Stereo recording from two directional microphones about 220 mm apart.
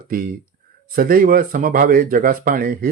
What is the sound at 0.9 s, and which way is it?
Speech, 40° right (ahead or behind).